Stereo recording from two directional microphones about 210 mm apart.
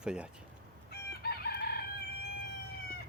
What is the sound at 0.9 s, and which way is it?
Chicken, 50° left (ahead or behind).